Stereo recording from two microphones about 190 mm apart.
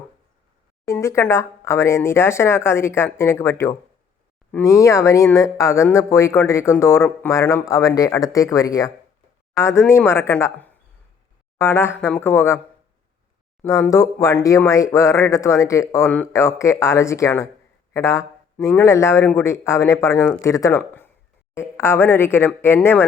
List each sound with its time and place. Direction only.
0.9 s speech: 15° left (ahead or behind)
13.6 s speech: 15° left (ahead or behind)